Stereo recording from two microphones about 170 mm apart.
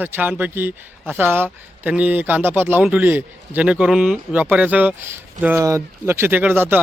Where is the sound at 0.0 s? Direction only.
10° right (ahead or behind).